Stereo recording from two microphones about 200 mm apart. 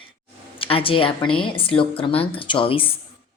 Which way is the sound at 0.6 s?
25° left (ahead or behind).